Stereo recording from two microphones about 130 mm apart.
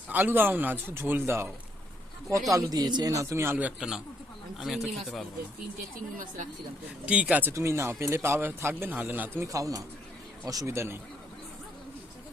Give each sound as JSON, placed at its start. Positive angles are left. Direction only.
{"t": 0.1, "sound": "speech", "side_deg": -15}
{"t": 2.5, "sound": "speech", "side_deg": -25}
{"t": 6.1, "sound": "speech", "side_deg": -90}
{"t": 7.0, "sound": "speech", "side_deg": -10}